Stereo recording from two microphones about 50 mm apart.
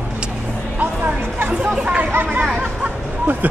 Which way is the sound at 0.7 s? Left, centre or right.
Right.